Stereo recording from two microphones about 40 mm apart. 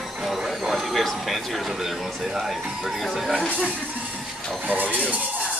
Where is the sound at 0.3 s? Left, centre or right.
Centre.